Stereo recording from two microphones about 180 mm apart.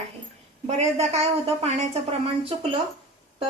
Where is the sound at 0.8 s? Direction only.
40° right (ahead or behind).